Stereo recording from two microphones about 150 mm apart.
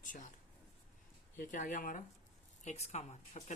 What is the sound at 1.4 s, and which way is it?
Speech, 60° left (ahead or behind).